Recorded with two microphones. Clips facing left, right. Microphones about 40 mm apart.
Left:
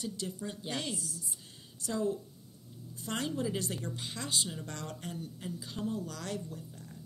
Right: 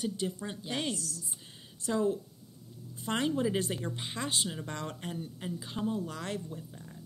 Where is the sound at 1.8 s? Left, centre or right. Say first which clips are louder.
Right 3 dB; right.